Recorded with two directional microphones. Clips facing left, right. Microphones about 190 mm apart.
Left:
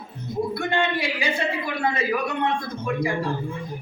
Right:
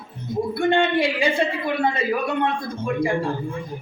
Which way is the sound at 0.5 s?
30° right (ahead or behind).